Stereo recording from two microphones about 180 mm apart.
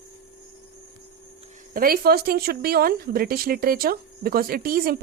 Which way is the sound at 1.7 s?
55° right (ahead or behind).